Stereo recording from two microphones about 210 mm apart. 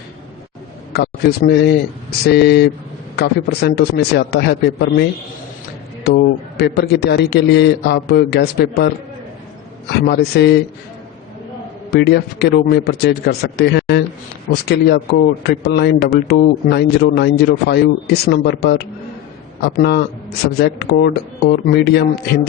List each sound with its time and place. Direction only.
0.9 s a man's voice: 50° left (ahead or behind)
6.1 s a man's voice: 50° left (ahead or behind)
10.1 s a man's voice: 55° left (ahead or behind)
11.9 s a man's voice: 50° left (ahead or behind)